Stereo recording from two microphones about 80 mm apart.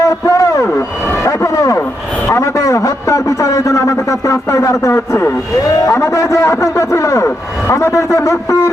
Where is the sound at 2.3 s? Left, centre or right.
Left.